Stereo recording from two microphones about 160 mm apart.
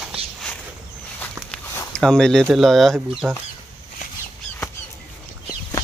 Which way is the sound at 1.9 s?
5° left (ahead or behind).